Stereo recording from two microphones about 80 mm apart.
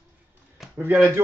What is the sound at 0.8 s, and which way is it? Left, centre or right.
Speech, right.